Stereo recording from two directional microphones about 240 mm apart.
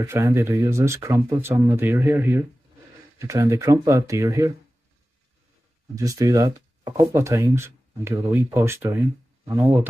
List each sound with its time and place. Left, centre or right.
0.0 s speech: centre
5.9 s speech: centre